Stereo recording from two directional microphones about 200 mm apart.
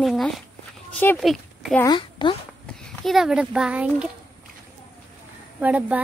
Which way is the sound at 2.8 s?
Centre (ahead or behind).